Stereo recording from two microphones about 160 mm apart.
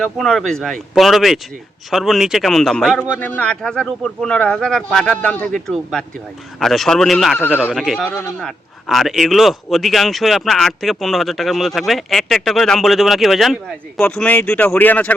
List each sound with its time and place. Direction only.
0.0 s speech: 5° left (ahead or behind)
7.3 s speech: 10° left (ahead or behind)
7.6 s speech: centre (ahead or behind)
8.1 s speech: 15° left (ahead or behind)
8.4 s speech: centre (ahead or behind)